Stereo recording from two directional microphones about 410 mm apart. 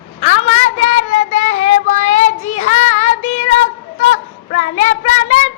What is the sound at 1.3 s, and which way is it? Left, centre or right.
Child singing, centre.